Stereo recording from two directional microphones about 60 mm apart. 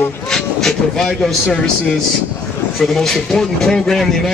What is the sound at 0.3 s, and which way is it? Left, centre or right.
Speech, centre.